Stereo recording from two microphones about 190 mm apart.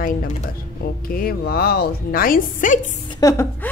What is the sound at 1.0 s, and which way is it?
A woman's voice, 50° left (ahead or behind).